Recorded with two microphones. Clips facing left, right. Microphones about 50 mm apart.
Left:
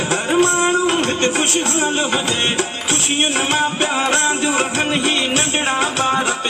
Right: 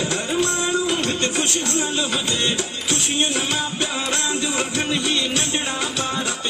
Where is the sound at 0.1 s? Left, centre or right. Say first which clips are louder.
Left 6 dB; left.